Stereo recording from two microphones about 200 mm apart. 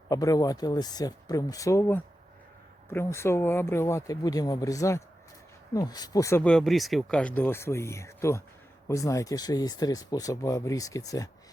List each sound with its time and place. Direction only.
0.1 s speech: 15° left (ahead or behind)